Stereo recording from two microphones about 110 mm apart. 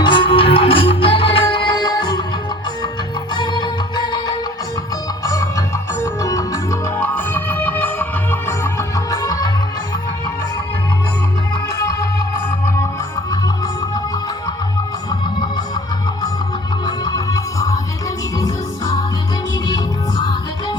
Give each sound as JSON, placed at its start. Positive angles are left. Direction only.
{"t": 0.0, "sound": "music", "side_deg": 45}
{"t": 3.3, "sound": "music", "side_deg": 40}
{"t": 5.2, "sound": "music", "side_deg": 30}
{"t": 12.6, "sound": "music", "side_deg": 25}
{"t": 15.1, "sound": "music", "side_deg": 40}
{"t": 16.8, "sound": "music", "side_deg": 40}
{"t": 19.6, "sound": "music", "side_deg": 40}